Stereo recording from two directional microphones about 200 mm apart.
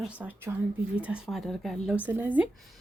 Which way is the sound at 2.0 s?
10° right (ahead or behind).